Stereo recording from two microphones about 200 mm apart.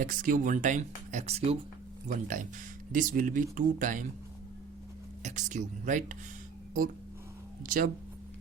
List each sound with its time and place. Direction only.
0.0 s speech: 40° right (ahead or behind)
5.2 s speech: 35° right (ahead or behind)
7.6 s speech: 45° right (ahead or behind)